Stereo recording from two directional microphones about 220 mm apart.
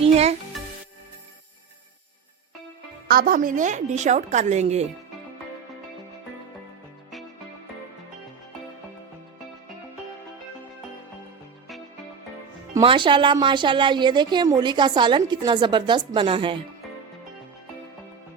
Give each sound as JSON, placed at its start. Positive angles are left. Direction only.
{"t": 0.0, "sound": "a child's voice", "side_deg": -30}
{"t": 3.1, "sound": "a woman's voice", "side_deg": -40}
{"t": 12.7, "sound": "a woman's voice", "side_deg": -20}